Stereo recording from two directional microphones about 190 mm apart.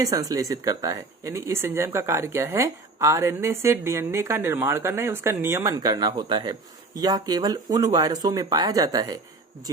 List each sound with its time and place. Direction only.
0.0 s speech: 20° right (ahead or behind)